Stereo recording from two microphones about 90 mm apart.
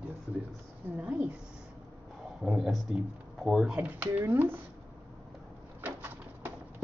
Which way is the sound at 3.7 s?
20° right (ahead or behind).